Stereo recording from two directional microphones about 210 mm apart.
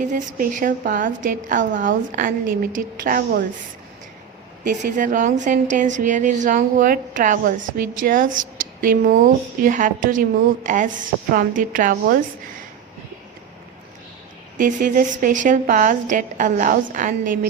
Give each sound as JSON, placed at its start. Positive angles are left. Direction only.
{"t": 0.0, "sound": "a woman's voice", "side_deg": -35}
{"t": 4.6, "sound": "a woman's voice", "side_deg": -40}
{"t": 14.6, "sound": "a woman's voice", "side_deg": -40}